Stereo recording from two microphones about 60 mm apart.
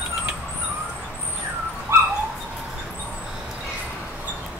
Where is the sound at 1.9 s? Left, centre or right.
Right.